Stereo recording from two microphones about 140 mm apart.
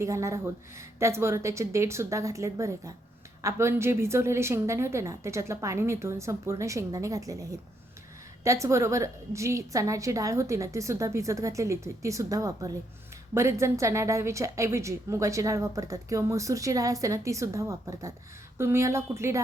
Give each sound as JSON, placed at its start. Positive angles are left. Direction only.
{"t": 0.0, "sound": "a woman's voice", "side_deg": -20}